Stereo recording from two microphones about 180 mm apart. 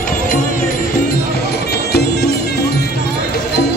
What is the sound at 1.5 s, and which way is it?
Music, 65° left (ahead or behind).